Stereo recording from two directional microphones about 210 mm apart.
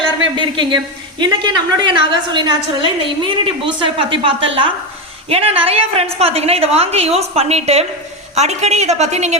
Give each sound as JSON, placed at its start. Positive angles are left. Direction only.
{"t": 0.3, "sound": "a woman's voice", "side_deg": -20}